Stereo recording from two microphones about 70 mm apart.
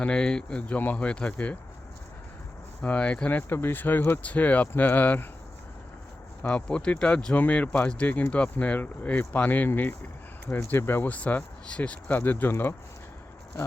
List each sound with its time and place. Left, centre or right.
0.0 s speech: centre
2.8 s speech: centre
6.4 s speech: centre
7.3 s speech: left